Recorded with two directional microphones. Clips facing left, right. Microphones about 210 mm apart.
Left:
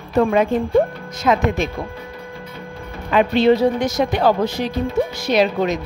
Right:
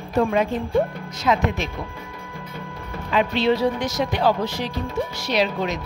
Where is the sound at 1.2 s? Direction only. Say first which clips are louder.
Left 4 dB; 50° left (ahead or behind).